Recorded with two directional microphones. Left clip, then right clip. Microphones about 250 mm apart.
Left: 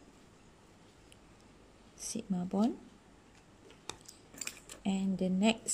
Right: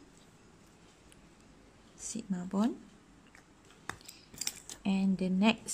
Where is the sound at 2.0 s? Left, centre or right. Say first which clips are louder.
Left 1 dB; centre.